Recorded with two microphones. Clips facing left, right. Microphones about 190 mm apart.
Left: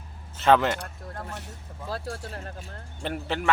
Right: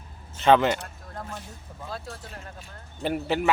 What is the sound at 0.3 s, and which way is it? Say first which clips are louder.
Speech: right 1 dB; centre (ahead or behind).